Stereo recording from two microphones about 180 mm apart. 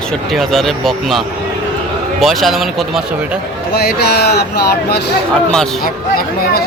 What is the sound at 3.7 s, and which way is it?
Speech, 60° left (ahead or behind).